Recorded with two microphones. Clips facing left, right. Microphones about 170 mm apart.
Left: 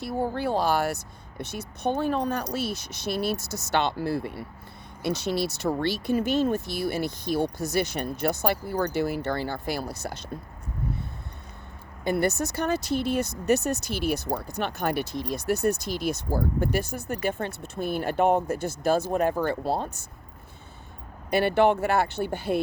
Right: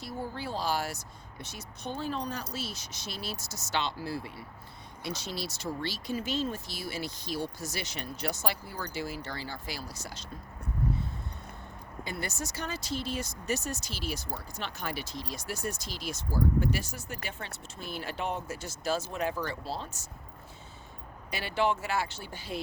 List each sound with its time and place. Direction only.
0.0 s speech: 65° left (ahead or behind)
12.0 s speech: 60° left (ahead or behind)
21.2 s speech: 55° left (ahead or behind)